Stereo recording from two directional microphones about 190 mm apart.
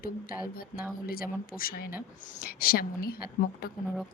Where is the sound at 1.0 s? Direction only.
50° left (ahead or behind).